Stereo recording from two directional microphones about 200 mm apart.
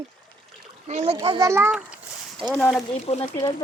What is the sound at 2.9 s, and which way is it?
Speech, 30° left (ahead or behind).